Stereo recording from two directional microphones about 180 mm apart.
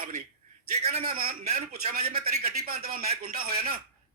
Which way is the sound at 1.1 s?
55° right (ahead or behind).